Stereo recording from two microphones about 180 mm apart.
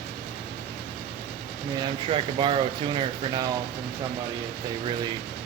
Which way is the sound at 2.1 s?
30° right (ahead or behind).